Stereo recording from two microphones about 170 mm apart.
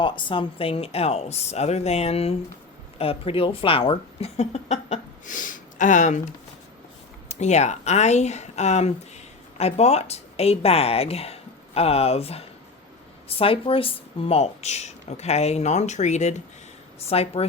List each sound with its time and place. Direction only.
0.0 s speech: 30° left (ahead or behind); by 6.1 s 45° left (ahead or behind)
7.3 s speech: 40° left (ahead or behind)